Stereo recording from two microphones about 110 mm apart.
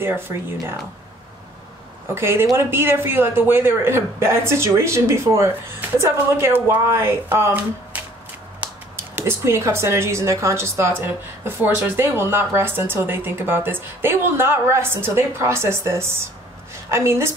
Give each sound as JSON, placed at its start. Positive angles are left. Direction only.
{"t": 0.0, "sound": "speech", "side_deg": -20}
{"t": 2.0, "sound": "speech", "side_deg": -20}